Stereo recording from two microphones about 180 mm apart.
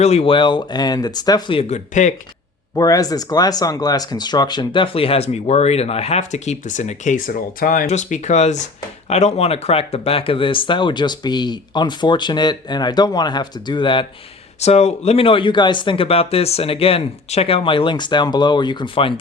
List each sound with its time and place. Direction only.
0.0 s speech: 35° left (ahead or behind)
2.7 s speech: 20° left (ahead or behind)
14.6 s speech: 35° left (ahead or behind)